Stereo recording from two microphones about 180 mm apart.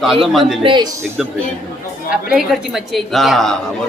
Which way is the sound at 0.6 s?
25° right (ahead or behind).